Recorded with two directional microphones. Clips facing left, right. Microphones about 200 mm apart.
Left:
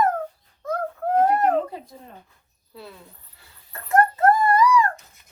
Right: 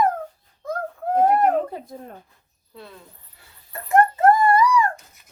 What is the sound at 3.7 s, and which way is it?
Dog, 15° right (ahead or behind).